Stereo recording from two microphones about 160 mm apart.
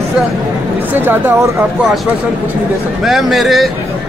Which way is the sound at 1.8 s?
Centre (ahead or behind).